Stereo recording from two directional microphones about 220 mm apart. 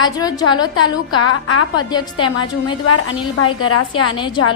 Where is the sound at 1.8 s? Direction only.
20° left (ahead or behind).